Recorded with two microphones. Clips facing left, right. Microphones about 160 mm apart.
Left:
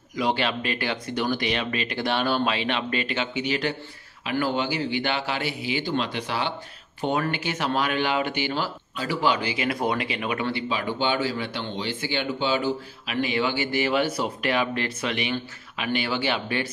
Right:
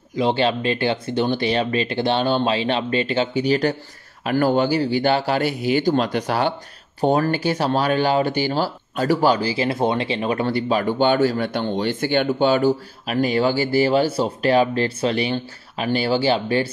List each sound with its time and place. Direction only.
0.1 s speech: 30° right (ahead or behind)